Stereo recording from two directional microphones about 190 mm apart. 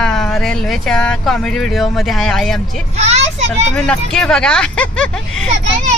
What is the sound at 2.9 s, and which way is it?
Speech, 35° right (ahead or behind).